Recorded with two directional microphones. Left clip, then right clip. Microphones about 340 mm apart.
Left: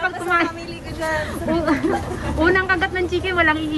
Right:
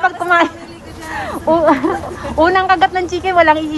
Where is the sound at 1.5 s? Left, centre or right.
Centre.